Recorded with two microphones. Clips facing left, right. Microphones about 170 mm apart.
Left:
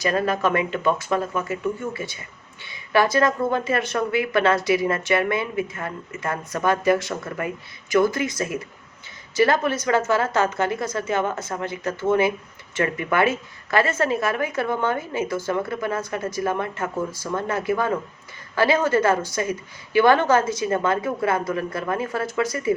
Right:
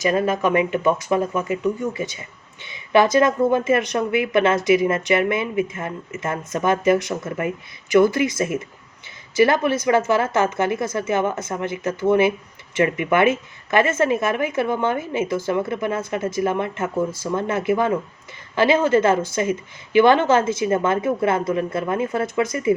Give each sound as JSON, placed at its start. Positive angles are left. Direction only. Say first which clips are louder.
{"t": 0.0, "sound": "speech", "louder": "right 2 dB", "side_deg": -20}